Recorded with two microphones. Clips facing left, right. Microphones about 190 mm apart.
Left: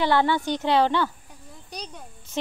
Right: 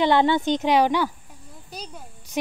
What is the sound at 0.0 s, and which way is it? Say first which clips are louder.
Speech: right 3 dB; 20° right (ahead or behind).